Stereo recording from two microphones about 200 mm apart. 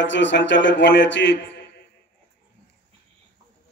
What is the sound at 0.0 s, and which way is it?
Speech, 65° left (ahead or behind).